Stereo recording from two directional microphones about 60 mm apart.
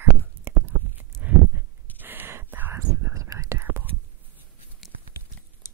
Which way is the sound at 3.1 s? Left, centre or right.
Right.